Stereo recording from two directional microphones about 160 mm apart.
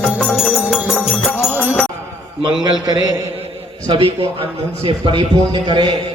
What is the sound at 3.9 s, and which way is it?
A man's voice, 35° right (ahead or behind).